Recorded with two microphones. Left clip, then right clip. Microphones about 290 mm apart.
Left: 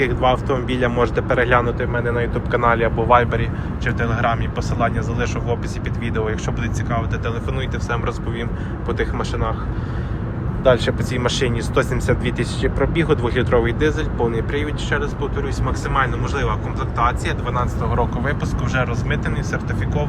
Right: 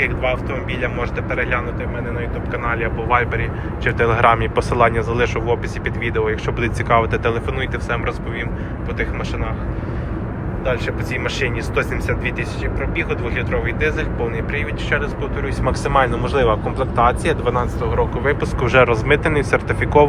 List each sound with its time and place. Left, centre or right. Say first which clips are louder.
0.0 s speech: left 2 dB; left
3.8 s speech: right 6 dB; centre
8.9 s speech: left 2 dB; left
10.6 s speech: left 6 dB; left
15.6 s speech: right 5 dB; centre